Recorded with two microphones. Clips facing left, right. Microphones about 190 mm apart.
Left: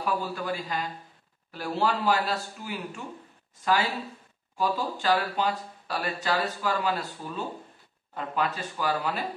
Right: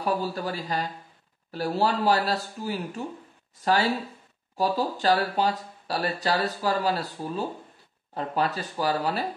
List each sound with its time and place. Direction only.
0.0 s speech: 35° right (ahead or behind)
4.6 s speech: 40° right (ahead or behind)